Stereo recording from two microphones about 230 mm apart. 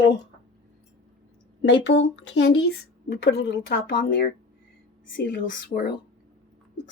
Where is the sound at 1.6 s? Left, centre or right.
Left.